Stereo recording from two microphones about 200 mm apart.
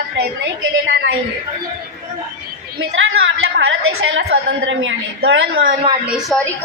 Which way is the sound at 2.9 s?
70° right (ahead or behind).